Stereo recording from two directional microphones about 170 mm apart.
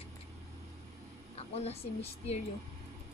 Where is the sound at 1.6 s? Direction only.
35° left (ahead or behind).